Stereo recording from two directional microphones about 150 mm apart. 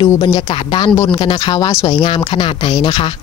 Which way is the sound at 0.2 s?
30° left (ahead or behind).